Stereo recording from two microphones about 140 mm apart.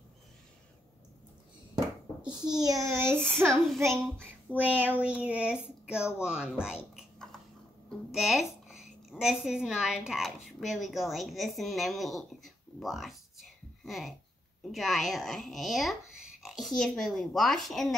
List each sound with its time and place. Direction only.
2.2 s a child's voice: 30° right (ahead or behind)
3.6 s a child's voice: centre (ahead or behind)
4.5 s speech: 10° right (ahead or behind)
8.1 s a woman's voice: 5° right (ahead or behind)